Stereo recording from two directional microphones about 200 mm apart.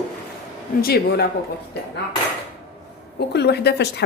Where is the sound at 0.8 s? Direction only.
50° left (ahead or behind).